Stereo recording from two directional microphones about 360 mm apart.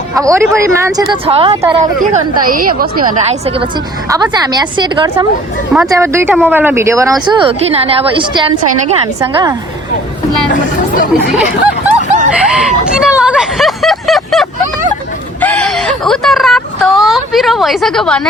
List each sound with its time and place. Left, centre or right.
0.1 s a woman's voice: centre
10.5 s speech: left
12.3 s speech: centre
15.4 s whimper: centre